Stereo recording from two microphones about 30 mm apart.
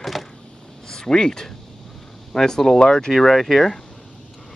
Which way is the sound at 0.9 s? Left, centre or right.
Centre.